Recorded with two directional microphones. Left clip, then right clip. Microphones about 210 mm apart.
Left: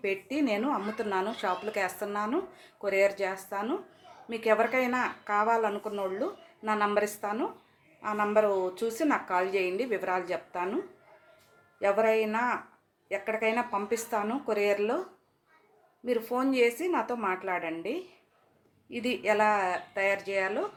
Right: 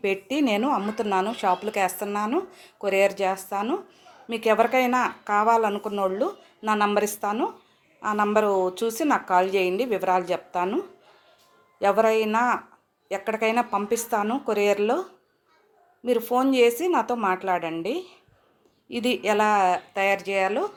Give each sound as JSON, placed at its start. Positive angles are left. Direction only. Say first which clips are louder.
{"t": 0.0, "sound": "a woman's voice", "louder": "right 6 dB", "side_deg": -40}
{"t": 11.8, "sound": "a woman's voice", "louder": "right 5 dB", "side_deg": -35}
{"t": 16.0, "sound": "a woman's voice", "louder": "right 7 dB", "side_deg": -35}